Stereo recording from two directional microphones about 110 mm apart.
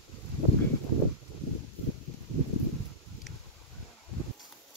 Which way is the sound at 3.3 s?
Centre (ahead or behind).